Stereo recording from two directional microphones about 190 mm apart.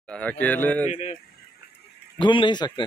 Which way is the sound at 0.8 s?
35° left (ahead or behind).